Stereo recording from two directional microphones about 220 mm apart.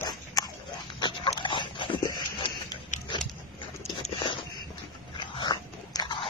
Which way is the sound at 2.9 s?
35° left (ahead or behind).